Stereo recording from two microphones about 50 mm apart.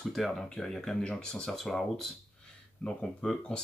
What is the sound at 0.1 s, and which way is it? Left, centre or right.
Speech, centre.